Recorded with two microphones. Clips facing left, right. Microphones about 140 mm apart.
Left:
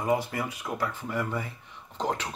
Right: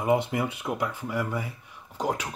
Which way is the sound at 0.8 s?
10° right (ahead or behind).